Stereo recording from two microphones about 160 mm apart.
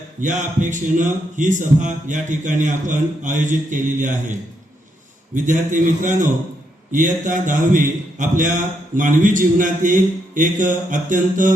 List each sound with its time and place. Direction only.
0.2 s a man's voice: 50° right (ahead or behind)